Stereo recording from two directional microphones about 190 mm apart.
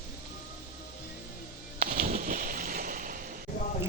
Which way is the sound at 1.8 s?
50° right (ahead or behind).